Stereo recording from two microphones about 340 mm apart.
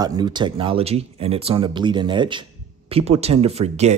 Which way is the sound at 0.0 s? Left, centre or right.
Centre.